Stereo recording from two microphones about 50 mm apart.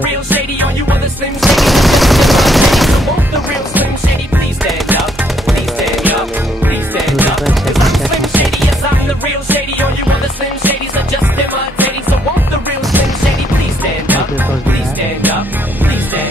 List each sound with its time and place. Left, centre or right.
0.0 s music: right
1.4 s machine gun: centre
7.4 s music: centre